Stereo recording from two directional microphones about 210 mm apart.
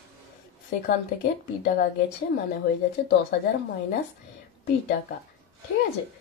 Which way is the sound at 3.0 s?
50° left (ahead or behind).